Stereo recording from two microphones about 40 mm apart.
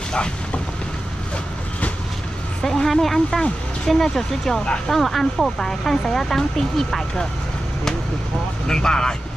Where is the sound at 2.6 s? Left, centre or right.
Centre.